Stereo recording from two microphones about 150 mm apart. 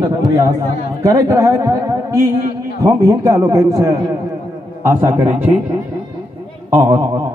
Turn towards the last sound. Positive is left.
turn(degrees=-20)  # may be behind; listen again after turning